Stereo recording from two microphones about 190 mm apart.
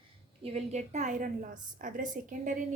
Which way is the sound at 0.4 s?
35° right (ahead or behind).